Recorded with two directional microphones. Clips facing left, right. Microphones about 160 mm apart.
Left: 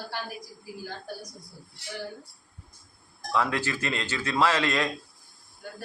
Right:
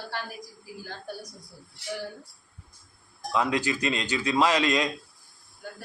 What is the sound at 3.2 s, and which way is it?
Speech, 20° right (ahead or behind).